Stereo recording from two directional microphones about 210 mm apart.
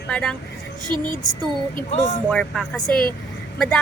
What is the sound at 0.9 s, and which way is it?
Music, 20° right (ahead or behind).